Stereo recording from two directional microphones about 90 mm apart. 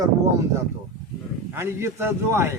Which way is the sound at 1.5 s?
30° right (ahead or behind).